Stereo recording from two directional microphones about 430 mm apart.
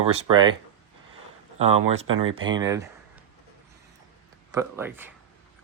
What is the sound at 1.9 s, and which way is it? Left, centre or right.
Speech, centre.